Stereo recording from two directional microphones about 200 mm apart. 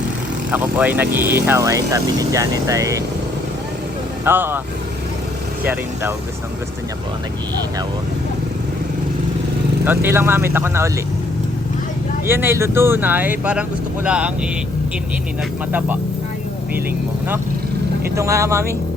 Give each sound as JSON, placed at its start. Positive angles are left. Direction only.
{"t": 0.5, "sound": "speech", "side_deg": -10}
{"t": 4.3, "sound": "speech", "side_deg": -10}
{"t": 5.6, "sound": "speech", "side_deg": -10}
{"t": 9.8, "sound": "speech", "side_deg": -10}
{"t": 12.2, "sound": "speech", "side_deg": -10}
{"t": 18.2, "sound": "speech", "side_deg": -15}